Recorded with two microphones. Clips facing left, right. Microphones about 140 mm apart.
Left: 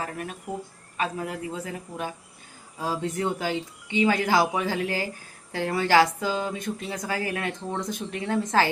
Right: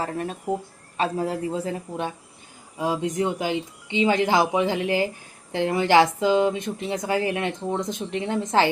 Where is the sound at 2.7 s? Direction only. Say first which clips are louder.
Right 4 dB; 15° right (ahead or behind).